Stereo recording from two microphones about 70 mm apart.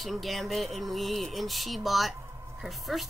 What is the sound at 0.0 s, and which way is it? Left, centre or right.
A woman's voice, centre.